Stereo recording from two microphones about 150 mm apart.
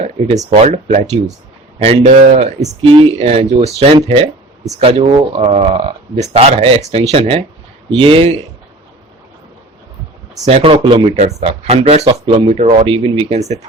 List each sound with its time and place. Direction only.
0.0 s speech: 45° right (ahead or behind)
2.8 s speech: 40° right (ahead or behind)
10.4 s speech: 40° right (ahead or behind)
11.2 s speech: 45° right (ahead or behind)